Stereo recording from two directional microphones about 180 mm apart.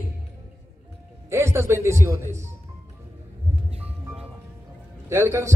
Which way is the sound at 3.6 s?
35° right (ahead or behind).